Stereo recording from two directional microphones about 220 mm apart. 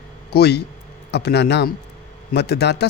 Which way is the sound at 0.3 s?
50° left (ahead or behind).